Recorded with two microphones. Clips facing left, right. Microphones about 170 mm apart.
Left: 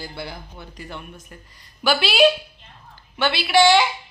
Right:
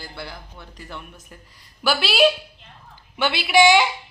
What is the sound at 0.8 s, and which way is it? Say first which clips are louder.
Speech: left 2 dB; centre (ahead or behind).